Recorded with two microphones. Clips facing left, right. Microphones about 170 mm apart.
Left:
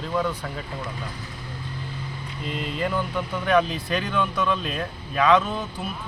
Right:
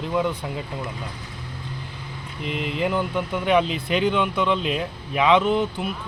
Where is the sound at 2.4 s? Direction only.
15° right (ahead or behind).